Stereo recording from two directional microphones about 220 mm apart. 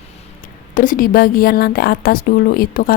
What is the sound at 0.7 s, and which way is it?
A woman's voice, 40° left (ahead or behind).